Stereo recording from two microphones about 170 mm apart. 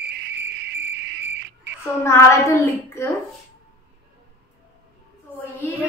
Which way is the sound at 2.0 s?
15° left (ahead or behind).